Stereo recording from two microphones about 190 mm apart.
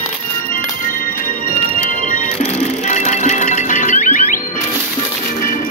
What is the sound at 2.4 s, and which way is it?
Music, 40° left (ahead or behind).